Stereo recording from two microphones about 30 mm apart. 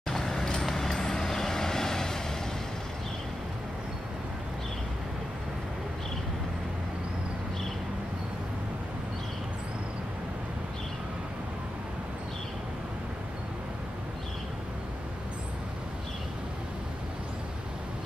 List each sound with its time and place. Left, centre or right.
0.1 s vehicle: left
0.6 s vehicle: centre